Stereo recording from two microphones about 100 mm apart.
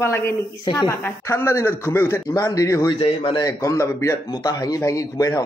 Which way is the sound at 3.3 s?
35° left (ahead or behind).